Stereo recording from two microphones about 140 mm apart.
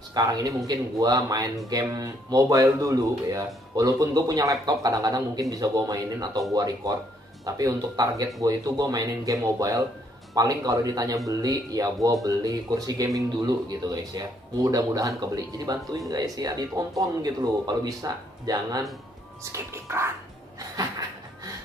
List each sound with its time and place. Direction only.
0.1 s speech: 25° right (ahead or behind)